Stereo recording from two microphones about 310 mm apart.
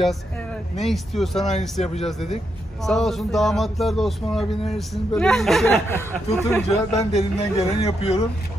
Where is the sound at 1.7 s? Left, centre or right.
Left.